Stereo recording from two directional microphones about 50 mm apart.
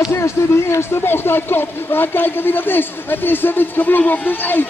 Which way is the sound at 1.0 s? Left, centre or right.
Left.